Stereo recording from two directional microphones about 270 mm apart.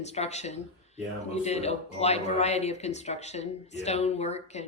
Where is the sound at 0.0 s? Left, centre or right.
Left.